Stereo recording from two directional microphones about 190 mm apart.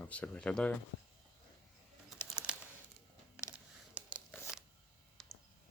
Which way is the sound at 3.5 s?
5° right (ahead or behind).